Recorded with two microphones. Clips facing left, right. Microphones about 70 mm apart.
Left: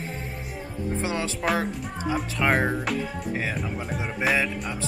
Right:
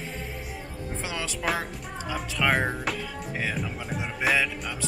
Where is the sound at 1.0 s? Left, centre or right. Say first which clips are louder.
Left 2 dB; left.